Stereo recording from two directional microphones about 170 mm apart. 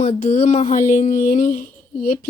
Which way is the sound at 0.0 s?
40° left (ahead or behind).